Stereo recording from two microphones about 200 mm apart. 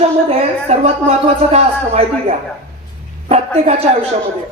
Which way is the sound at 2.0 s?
30° right (ahead or behind).